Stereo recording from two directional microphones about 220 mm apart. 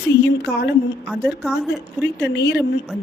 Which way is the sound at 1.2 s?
5° right (ahead or behind).